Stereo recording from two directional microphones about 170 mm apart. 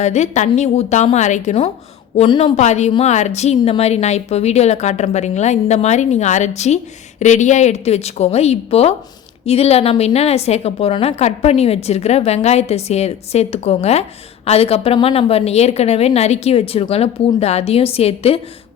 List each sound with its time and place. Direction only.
0.0 s a woman's voice: 45° left (ahead or behind)